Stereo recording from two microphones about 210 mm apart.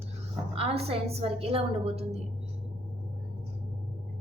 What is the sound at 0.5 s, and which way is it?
A woman's voice, 30° right (ahead or behind).